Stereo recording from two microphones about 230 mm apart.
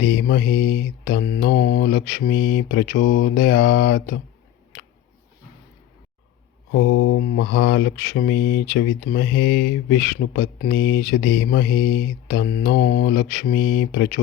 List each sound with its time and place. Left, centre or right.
0.0 s mantra: left
6.7 s mantra: left